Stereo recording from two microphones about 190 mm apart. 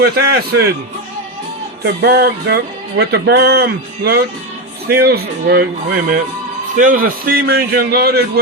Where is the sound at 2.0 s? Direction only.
60° right (ahead or behind).